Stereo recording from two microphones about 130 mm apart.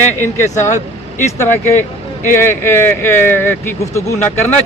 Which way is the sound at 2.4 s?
20° left (ahead or behind).